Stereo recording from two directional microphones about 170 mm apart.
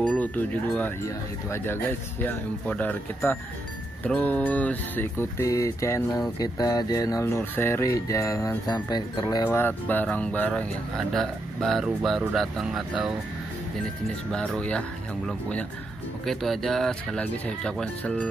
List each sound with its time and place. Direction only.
0.2 s speech: 10° left (ahead or behind)
9.6 s speech: 10° left (ahead or behind)
14.3 s speech: 5° left (ahead or behind)
16.3 s speech: centre (ahead or behind)